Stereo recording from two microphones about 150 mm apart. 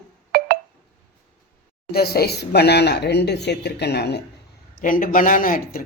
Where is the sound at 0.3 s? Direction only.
85° right.